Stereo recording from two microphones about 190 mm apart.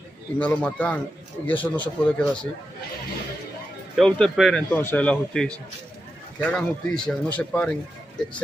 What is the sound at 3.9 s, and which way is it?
A man's voice, 5° left (ahead or behind).